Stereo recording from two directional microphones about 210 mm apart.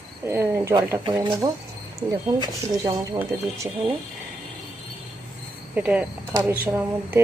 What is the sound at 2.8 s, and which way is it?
Speech, 15° right (ahead or behind).